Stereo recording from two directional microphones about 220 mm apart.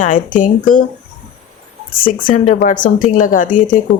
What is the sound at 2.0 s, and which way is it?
Speech, 40° left (ahead or behind).